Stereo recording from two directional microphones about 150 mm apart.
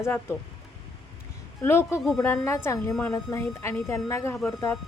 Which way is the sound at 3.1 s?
20° left (ahead or behind).